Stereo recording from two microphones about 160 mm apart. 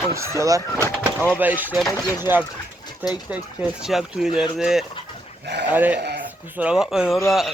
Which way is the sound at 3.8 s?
5° right (ahead or behind).